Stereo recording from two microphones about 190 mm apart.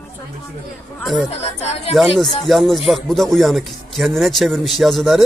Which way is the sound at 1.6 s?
35° left (ahead or behind).